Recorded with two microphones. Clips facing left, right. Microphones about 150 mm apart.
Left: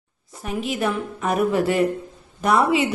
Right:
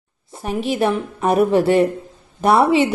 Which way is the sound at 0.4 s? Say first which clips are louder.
Right 5 dB; 30° right (ahead or behind).